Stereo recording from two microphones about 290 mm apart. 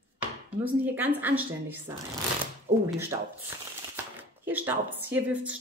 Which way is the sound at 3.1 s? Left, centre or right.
Centre.